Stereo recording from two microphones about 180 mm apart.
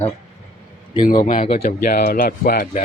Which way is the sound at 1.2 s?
45° left (ahead or behind).